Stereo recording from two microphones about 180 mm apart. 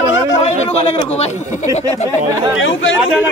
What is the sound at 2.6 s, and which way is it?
Speech, 90° left.